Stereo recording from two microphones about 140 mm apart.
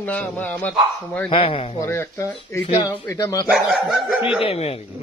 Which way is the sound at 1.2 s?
40° left (ahead or behind).